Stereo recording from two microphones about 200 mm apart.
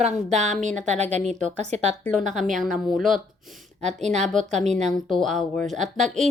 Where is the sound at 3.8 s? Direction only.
35° right (ahead or behind).